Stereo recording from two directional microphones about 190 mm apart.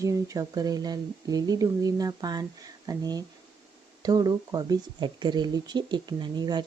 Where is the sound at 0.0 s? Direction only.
15° right (ahead or behind).